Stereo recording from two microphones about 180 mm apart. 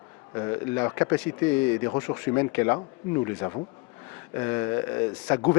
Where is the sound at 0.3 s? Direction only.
20° left (ahead or behind).